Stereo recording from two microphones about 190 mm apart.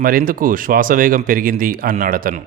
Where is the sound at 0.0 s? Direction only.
50° right (ahead or behind).